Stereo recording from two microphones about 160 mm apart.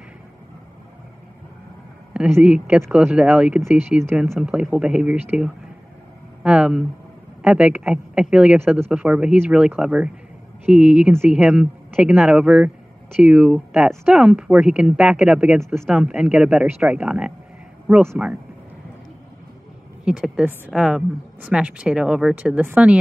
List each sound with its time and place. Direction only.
2.1 s a woman's voice: 10° right (ahead or behind)
20.1 s a woman's voice: 5° right (ahead or behind)